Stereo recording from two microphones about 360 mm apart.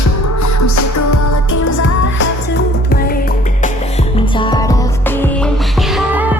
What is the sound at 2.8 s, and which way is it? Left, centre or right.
Music, left.